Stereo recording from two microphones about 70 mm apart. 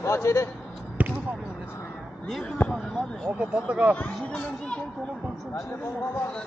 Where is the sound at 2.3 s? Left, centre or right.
Centre.